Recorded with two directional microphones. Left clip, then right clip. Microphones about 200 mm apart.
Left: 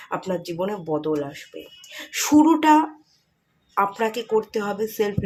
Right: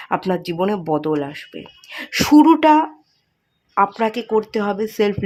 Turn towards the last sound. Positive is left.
turn(degrees=-35)  # may be behind; listen again after turning